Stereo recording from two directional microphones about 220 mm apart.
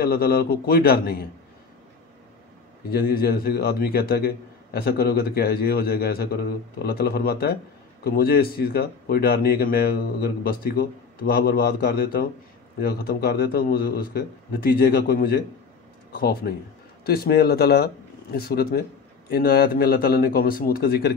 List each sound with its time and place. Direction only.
0.0 s a man's voice: 45° left (ahead or behind)
2.9 s a man's voice: 45° left (ahead or behind)